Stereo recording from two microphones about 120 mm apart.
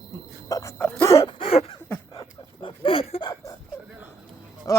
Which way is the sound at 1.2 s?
55° left (ahead or behind).